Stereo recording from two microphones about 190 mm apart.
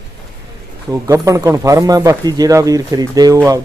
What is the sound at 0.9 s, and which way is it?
A man's voice, 15° right (ahead or behind).